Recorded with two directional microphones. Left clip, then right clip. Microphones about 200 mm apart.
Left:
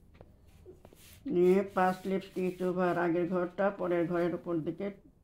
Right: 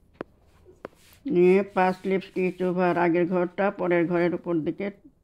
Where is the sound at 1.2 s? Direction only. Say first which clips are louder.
Right 7 dB; 40° right (ahead or behind).